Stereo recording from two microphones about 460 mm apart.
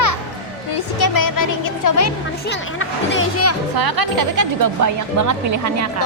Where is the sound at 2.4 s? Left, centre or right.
Left.